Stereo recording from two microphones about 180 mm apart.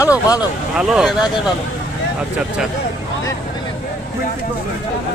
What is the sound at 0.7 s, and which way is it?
Speech, 5° right (ahead or behind).